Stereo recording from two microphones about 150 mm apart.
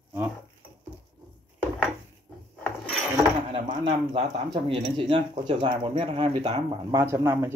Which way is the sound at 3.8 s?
30° right (ahead or behind).